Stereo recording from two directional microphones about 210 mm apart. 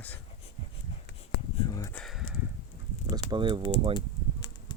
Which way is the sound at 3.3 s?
20° right (ahead or behind).